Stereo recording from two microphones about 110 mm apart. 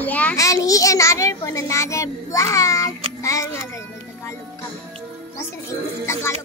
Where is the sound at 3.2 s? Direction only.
30° left (ahead or behind).